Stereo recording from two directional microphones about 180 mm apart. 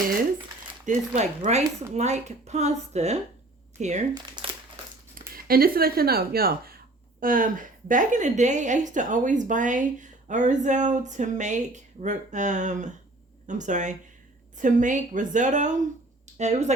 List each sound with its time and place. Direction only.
0.9 s speech: 40° right (ahead or behind)
4.4 s crumpling: 25° right (ahead or behind)
5.3 s a woman's voice: 55° right (ahead or behind); by 16.7 s 40° right (ahead or behind)